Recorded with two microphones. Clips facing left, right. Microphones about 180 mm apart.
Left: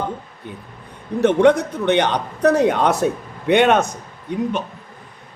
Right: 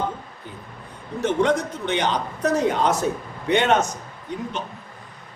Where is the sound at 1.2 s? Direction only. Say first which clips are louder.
Left 7 dB; 60° left (ahead or behind).